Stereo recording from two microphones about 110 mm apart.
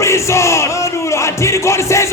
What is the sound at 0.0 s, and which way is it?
Music, 25° left (ahead or behind).